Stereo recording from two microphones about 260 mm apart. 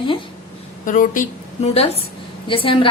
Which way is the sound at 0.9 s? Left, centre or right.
Left.